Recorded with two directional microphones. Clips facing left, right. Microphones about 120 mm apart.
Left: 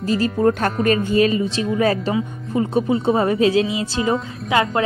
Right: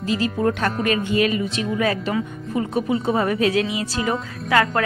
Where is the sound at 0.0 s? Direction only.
40° left (ahead or behind).